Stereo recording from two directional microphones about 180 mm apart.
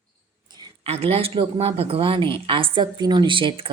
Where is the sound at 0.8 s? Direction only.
35° right (ahead or behind).